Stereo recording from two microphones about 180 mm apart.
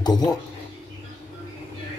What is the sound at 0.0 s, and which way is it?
Speech, 20° left (ahead or behind).